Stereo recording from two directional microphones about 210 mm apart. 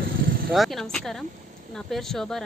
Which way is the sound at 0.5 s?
Centre (ahead or behind).